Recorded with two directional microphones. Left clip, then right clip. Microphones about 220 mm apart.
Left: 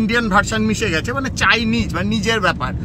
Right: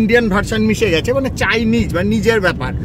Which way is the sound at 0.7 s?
35° left (ahead or behind).